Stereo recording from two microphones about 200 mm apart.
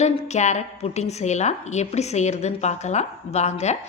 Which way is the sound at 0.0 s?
35° left (ahead or behind).